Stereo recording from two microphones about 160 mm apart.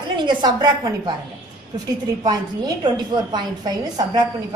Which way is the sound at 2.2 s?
25° right (ahead or behind).